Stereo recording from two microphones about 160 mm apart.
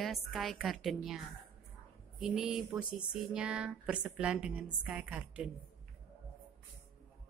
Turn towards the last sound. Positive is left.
turn(degrees=-10)  # may be behind; listen again after turning